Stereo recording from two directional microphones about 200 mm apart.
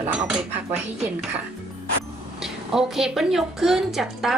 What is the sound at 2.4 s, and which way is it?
A woman's voice, centre (ahead or behind).